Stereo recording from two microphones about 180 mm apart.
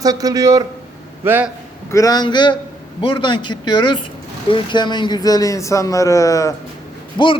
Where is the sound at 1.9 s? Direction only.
20° left (ahead or behind).